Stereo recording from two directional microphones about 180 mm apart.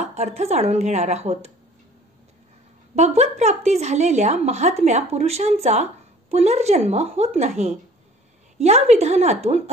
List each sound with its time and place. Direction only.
0.0 s a woman's voice: 40° right (ahead or behind)
3.0 s a woman's voice: 40° right (ahead or behind)